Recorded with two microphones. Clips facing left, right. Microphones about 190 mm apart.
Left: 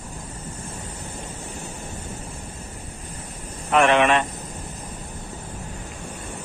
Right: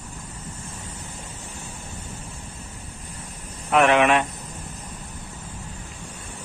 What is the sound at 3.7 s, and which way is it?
Speech, 5° right (ahead or behind).